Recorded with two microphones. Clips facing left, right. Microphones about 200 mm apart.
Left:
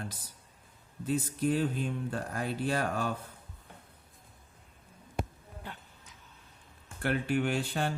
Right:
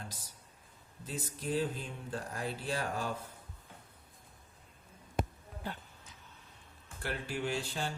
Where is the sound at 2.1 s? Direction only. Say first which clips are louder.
Left 4 dB; 60° left (ahead or behind).